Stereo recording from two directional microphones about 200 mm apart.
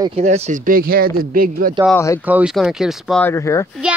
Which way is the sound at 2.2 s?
5° right (ahead or behind).